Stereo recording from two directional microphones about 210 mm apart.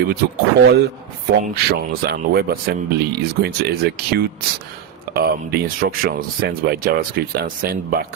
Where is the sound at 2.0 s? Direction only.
50° right (ahead or behind).